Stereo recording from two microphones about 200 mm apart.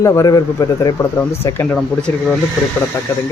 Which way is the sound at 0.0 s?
15° left (ahead or behind).